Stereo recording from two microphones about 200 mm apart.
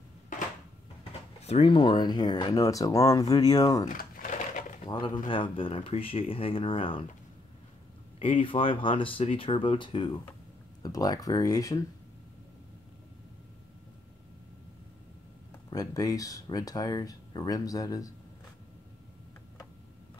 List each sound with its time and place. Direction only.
1.4 s speech: 30° left (ahead or behind)
3.9 s a sound: 45° left (ahead or behind)
4.8 s speech: 25° left (ahead or behind)
8.2 s speech: 25° left (ahead or behind)
15.7 s speech: 20° left (ahead or behind)